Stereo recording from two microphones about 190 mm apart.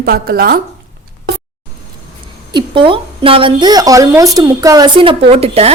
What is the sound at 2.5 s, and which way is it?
A woman's voice, 25° right (ahead or behind).